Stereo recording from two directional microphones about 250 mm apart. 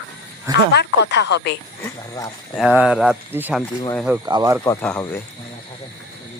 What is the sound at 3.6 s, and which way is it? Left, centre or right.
Speech, centre.